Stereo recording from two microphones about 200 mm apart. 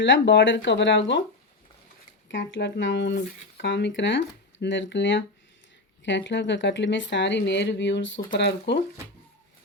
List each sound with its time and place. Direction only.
0.0 s speech: 65° left (ahead or behind)
2.3 s speech: 65° left (ahead or behind)